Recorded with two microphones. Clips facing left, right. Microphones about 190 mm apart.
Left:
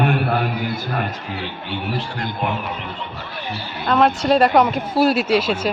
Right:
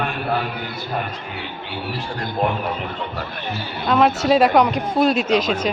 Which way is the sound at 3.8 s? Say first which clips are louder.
Even; centre (ahead or behind).